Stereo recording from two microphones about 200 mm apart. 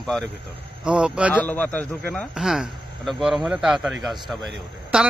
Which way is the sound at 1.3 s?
10° left (ahead or behind).